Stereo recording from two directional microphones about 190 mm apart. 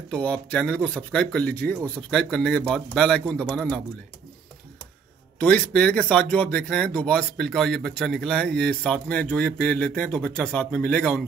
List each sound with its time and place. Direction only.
0.1 s speech: 5° left (ahead or behind)
5.4 s speech: 5° left (ahead or behind)